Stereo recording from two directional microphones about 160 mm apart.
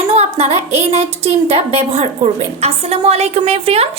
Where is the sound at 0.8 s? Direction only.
40° right (ahead or behind).